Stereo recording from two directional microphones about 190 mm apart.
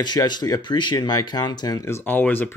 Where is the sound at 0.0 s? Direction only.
20° left (ahead or behind).